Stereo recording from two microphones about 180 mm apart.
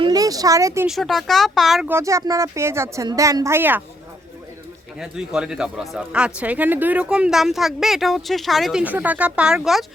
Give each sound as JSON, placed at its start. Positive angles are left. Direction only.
{"t": 0.0, "sound": "speech", "side_deg": -20}
{"t": 0.9, "sound": "speech", "side_deg": 0}
{"t": 1.9, "sound": "speech", "side_deg": -15}
{"t": 4.9, "sound": "speech", "side_deg": -5}